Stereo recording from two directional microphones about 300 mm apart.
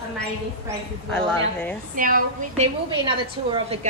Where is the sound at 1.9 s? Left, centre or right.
Right.